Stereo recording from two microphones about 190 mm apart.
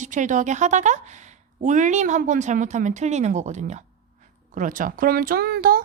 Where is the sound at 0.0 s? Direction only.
40° right (ahead or behind).